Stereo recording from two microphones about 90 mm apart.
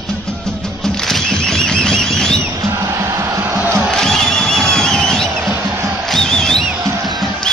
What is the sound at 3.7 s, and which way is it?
Music, 5° left (ahead or behind).